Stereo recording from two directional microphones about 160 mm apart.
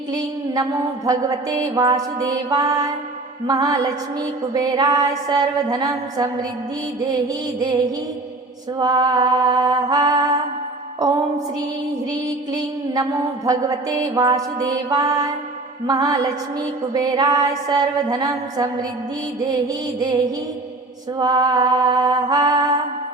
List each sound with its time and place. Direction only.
0.1 s mantra: 25° right (ahead or behind)
8.8 s mantra: 25° right (ahead or behind)
12.1 s mantra: 25° right (ahead or behind)